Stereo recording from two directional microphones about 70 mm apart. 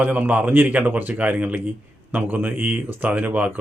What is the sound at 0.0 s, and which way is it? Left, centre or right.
Speech, right.